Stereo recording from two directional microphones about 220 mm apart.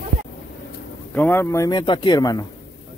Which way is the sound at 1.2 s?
10° left (ahead or behind).